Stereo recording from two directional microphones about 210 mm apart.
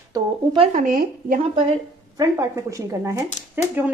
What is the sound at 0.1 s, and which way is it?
Speech, 20° right (ahead or behind).